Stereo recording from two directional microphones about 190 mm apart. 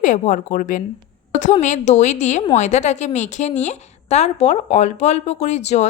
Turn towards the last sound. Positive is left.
turn(degrees=35)  # may be behind; listen again after turning